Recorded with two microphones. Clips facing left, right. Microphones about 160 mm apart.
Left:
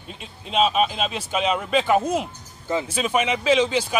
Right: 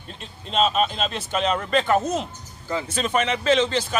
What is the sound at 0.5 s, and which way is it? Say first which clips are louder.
A man's voice: left 1 dB; 5° left (ahead or behind).